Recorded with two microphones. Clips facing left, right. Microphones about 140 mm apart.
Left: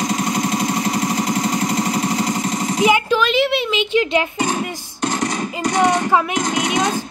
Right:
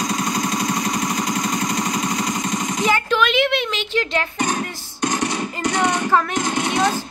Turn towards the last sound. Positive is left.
turn(degrees=45)  # may be behind; listen again after turning